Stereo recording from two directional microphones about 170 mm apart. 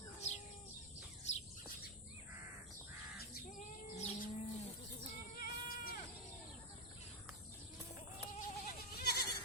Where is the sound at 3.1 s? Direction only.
65° left (ahead or behind).